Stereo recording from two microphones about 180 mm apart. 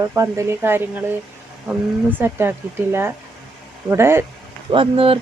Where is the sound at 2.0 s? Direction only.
10° right (ahead or behind).